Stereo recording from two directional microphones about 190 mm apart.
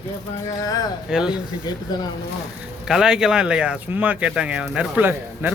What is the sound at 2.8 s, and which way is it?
Speech, 5° right (ahead or behind).